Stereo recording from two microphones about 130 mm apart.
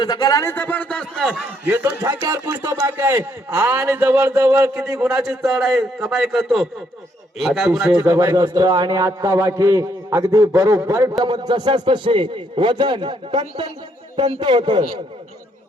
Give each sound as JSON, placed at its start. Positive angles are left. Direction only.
{"t": 0.0, "sound": "speech", "side_deg": 30}
{"t": 0.5, "sound": "speech", "side_deg": 15}
{"t": 1.6, "sound": "speech", "side_deg": -20}
{"t": 5.1, "sound": "a man's voice", "side_deg": -5}
{"t": 7.9, "sound": "a man's voice", "side_deg": -25}